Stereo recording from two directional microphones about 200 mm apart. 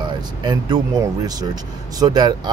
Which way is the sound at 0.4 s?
20° right (ahead or behind).